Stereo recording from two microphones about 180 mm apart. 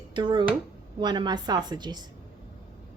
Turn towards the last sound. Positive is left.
turn(degrees=-25)  # may be behind; listen again after turning